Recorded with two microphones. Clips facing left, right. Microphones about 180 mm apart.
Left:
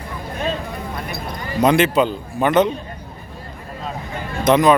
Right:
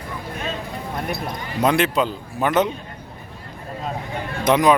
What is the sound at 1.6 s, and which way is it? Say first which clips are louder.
Speech: left 4 dB; centre (ahead or behind).